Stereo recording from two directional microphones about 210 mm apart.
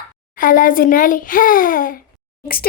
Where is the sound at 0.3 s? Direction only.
40° left (ahead or behind).